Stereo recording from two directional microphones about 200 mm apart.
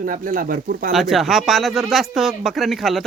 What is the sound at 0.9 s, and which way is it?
Speech, centre (ahead or behind).